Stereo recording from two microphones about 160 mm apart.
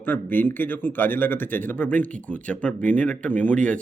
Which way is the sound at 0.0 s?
10° left (ahead or behind).